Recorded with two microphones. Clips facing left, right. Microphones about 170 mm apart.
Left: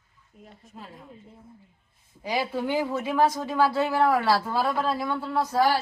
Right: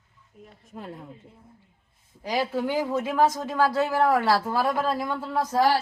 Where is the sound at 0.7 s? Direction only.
55° right (ahead or behind).